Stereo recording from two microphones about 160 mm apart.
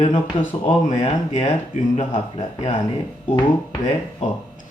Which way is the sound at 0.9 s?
40° left (ahead or behind).